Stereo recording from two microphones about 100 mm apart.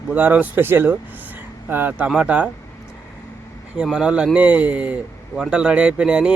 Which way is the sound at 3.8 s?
5° right (ahead or behind).